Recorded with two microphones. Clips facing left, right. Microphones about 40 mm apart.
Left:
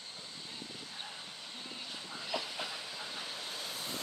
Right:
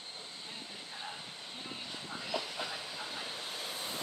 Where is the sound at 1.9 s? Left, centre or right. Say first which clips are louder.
Right 1 dB; centre.